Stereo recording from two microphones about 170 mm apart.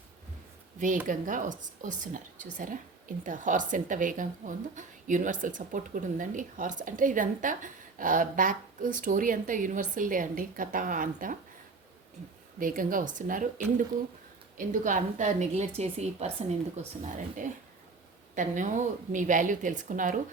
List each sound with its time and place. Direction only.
1.0 s a woman's voice: 50° right (ahead or behind)
12.5 s a woman's voice: 55° right (ahead or behind)
14.6 s a woman's voice: 50° right (ahead or behind)